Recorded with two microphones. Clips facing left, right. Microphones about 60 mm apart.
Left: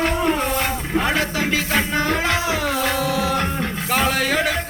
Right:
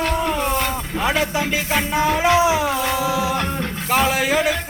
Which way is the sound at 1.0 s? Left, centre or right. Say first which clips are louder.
Right 3 dB; centre.